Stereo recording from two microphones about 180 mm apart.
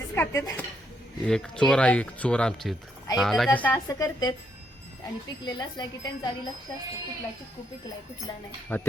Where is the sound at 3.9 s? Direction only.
20° left (ahead or behind).